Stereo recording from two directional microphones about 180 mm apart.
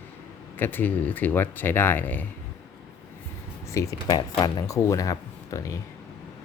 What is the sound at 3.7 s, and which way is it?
Speech, 20° left (ahead or behind).